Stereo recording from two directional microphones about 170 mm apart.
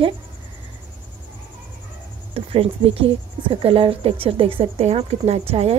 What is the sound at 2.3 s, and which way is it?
Speech, 35° right (ahead or behind).